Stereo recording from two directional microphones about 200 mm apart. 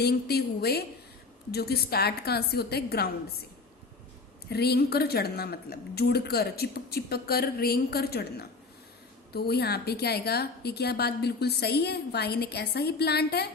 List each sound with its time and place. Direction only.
0.0 s a woman's voice: 55° left (ahead or behind)
4.4 s a woman's voice: 55° left (ahead or behind)